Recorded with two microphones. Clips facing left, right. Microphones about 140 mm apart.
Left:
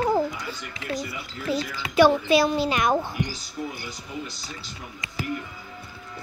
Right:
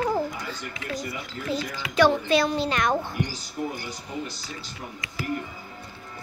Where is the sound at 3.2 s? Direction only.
45° right (ahead or behind).